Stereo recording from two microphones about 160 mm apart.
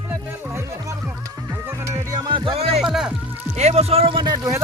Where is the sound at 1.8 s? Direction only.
20° right (ahead or behind).